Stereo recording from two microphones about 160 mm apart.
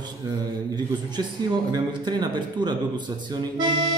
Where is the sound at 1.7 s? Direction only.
25° right (ahead or behind).